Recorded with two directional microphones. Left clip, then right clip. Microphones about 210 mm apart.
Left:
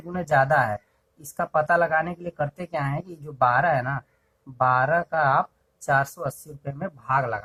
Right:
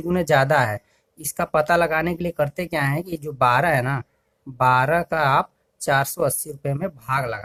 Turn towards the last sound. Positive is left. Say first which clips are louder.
# even
turn(degrees=-30)  # may be behind; listen again after turning